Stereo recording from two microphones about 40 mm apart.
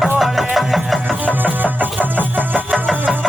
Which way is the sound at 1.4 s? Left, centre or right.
Right.